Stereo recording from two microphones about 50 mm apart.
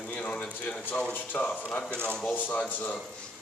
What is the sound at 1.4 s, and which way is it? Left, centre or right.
Speech, left.